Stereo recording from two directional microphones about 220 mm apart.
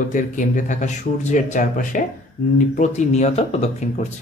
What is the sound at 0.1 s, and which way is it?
Speech, 35° left (ahead or behind).